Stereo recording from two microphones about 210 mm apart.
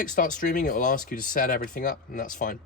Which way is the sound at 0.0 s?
40° left (ahead or behind).